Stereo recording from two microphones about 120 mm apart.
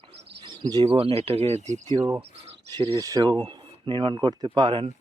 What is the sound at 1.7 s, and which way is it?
Speech, 35° right (ahead or behind).